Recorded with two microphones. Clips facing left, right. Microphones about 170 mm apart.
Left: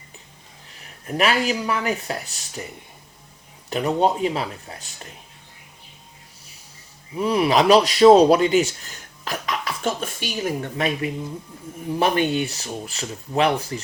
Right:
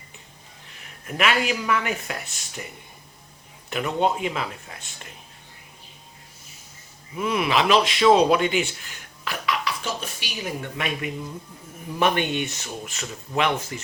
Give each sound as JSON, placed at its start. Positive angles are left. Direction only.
{"t": 1.0, "sound": "speech", "side_deg": 35}
{"t": 3.7, "sound": "speech", "side_deg": 35}
{"t": 7.2, "sound": "speech", "side_deg": 35}